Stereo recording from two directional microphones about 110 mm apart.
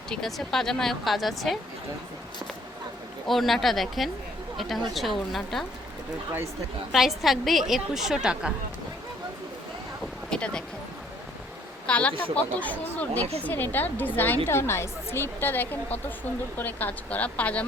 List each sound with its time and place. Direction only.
0.1 s speech: centre (ahead or behind)
3.2 s speech: centre (ahead or behind)
6.9 s speech: centre (ahead or behind)
10.2 s a sound: 10° left (ahead or behind)
11.9 s a woman's voice: 10° left (ahead or behind)